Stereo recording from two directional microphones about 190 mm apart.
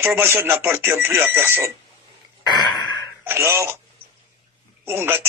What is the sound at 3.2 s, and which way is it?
Speech, 15° right (ahead or behind).